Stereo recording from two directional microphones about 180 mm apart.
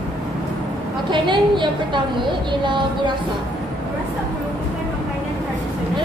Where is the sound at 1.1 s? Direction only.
25° right (ahead or behind).